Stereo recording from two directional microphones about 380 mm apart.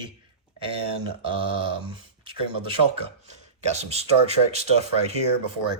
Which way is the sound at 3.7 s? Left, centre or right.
Centre.